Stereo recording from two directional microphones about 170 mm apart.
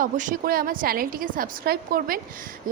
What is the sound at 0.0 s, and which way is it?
A woman's voice, 50° right (ahead or behind).